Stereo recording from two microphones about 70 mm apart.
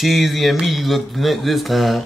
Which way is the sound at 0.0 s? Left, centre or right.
Centre.